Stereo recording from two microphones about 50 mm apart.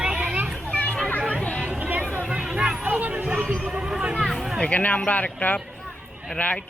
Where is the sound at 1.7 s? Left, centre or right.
Right; by 2.8 s centre.